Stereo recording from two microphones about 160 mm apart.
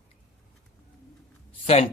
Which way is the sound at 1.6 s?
40° left (ahead or behind).